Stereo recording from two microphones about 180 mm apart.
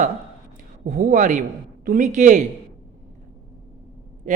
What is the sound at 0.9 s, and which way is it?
Speech, 50° right (ahead or behind).